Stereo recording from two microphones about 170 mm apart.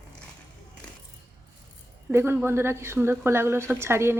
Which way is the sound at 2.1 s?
15° right (ahead or behind).